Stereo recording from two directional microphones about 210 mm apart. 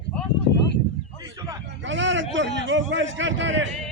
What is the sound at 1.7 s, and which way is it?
A man's voice, 60° right (ahead or behind).